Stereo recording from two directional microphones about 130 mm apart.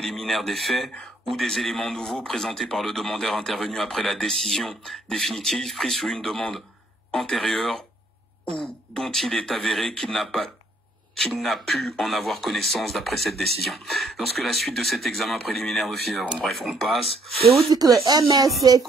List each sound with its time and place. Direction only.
0.0 s a man's voice: centre (ahead or behind)
17.6 s speech: 30° right (ahead or behind)